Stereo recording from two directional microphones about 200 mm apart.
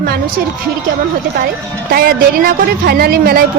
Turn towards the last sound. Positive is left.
turn(degrees=-50)  # may be behind; listen again after turning